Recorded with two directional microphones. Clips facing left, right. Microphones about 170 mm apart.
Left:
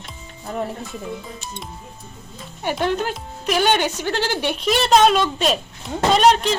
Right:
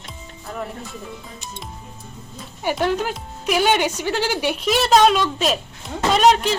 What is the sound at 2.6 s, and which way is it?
Speech, 5° right (ahead or behind).